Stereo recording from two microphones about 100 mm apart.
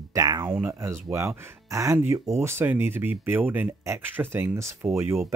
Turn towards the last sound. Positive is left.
turn(degrees=-30)  # may be behind; listen again after turning